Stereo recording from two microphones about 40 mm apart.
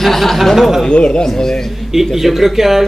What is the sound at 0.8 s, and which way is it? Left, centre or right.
Speech, left.